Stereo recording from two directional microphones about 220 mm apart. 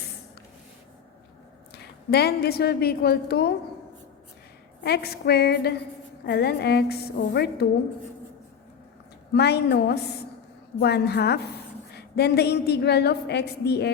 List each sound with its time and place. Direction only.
1.7 s a woman's voice: 50° left (ahead or behind)
4.8 s a woman's voice: 45° left (ahead or behind)
9.3 s a woman's voice: 50° left (ahead or behind)